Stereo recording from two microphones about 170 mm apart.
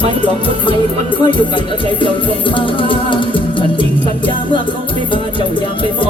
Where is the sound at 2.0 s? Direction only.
30° left (ahead or behind).